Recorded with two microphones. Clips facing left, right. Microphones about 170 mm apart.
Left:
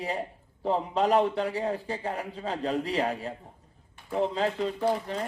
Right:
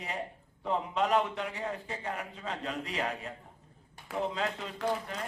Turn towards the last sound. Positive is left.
turn(degrees=35)  # may be behind; listen again after turning